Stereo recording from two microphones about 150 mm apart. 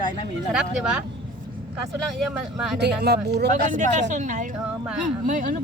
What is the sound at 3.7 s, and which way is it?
A woman's voice, 50° right (ahead or behind).